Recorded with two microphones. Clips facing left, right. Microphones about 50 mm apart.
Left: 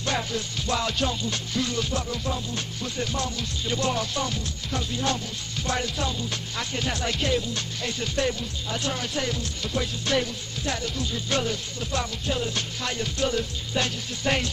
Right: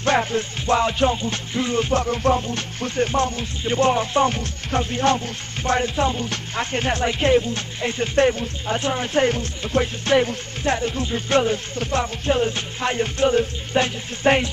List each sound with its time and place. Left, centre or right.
0.0 s music: right
6.1 s speech: right
6.5 s music: right